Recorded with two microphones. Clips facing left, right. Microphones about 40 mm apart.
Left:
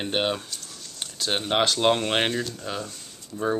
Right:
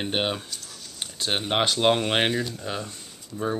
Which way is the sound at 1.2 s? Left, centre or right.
Centre.